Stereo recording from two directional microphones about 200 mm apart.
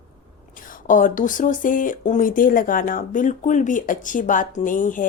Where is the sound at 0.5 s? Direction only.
40° left (ahead or behind).